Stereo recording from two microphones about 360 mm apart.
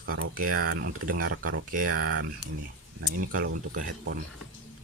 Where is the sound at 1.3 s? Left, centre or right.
Right.